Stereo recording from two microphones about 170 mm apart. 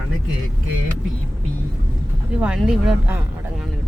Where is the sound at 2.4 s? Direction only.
5° right (ahead or behind).